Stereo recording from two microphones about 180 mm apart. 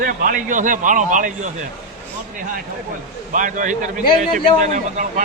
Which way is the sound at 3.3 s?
45° right (ahead or behind).